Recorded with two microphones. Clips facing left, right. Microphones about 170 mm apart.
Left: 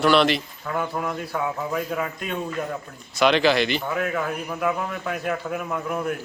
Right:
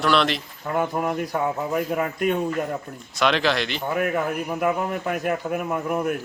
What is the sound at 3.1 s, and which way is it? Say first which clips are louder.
Speech: left 3 dB; centre (ahead or behind).